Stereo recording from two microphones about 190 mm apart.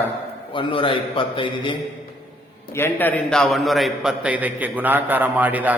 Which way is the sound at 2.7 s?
10° left (ahead or behind).